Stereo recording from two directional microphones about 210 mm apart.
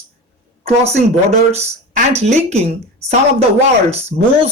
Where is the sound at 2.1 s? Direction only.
30° right (ahead or behind).